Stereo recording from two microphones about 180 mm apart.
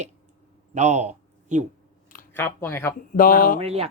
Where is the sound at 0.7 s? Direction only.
40° right (ahead or behind).